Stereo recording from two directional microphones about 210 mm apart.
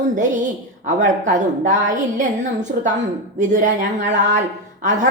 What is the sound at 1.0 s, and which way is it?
Speech, 40° right (ahead or behind).